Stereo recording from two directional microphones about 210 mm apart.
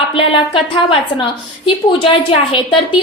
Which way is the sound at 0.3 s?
25° left (ahead or behind).